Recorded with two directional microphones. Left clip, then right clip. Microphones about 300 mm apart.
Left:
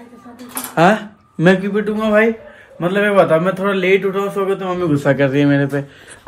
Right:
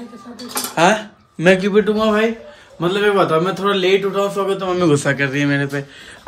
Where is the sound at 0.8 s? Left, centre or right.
Centre.